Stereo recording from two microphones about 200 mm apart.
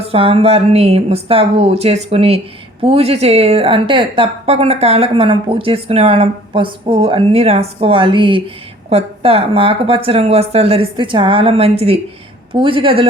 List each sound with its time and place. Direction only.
0.0 s a woman's voice: 30° right (ahead or behind)